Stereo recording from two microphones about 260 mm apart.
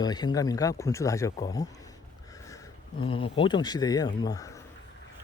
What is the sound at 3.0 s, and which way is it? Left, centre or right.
A man's voice, centre.